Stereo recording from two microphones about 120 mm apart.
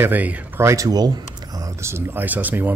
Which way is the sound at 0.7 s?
30° right (ahead or behind).